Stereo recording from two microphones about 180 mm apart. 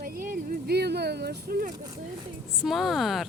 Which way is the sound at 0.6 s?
65° right (ahead or behind).